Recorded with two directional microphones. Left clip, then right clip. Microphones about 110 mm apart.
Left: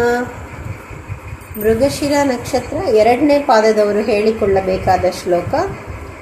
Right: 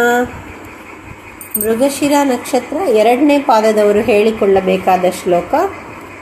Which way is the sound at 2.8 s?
30° right (ahead or behind).